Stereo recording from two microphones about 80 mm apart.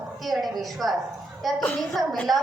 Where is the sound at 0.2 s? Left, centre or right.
Centre.